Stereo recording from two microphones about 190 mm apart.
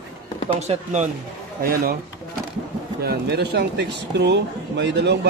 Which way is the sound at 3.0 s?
60° right (ahead or behind).